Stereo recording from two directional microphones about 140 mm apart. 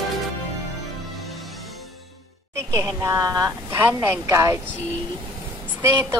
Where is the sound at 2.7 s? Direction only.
20° right (ahead or behind).